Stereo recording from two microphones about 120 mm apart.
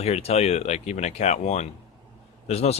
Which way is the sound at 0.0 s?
60° left (ahead or behind).